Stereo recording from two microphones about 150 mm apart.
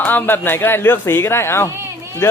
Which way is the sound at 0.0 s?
10° left (ahead or behind).